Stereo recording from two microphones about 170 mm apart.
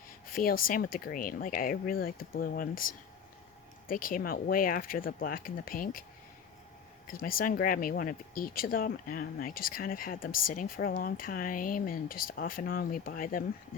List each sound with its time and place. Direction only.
0.3 s speech: 55° left (ahead or behind)
7.1 s speech: 55° left (ahead or behind)